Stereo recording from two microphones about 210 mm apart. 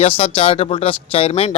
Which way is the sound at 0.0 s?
25° left (ahead or behind).